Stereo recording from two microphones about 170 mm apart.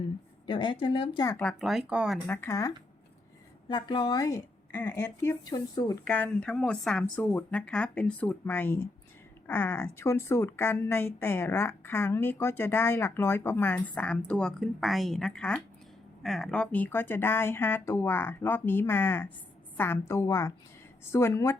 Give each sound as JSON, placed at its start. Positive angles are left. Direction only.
{"t": 0.4, "sound": "a woman's voice", "side_deg": 30}
{"t": 1.4, "sound": "speech", "side_deg": 0}
{"t": 2.2, "sound": "a woman's voice", "side_deg": 15}
{"t": 6.1, "sound": "a woman's voice", "side_deg": 10}